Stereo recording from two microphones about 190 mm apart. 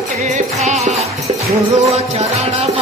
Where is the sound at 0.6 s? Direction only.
35° right (ahead or behind).